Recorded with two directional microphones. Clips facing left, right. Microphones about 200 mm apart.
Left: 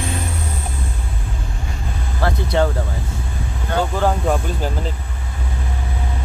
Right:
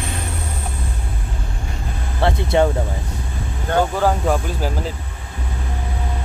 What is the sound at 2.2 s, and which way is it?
Vehicle, 25° right (ahead or behind).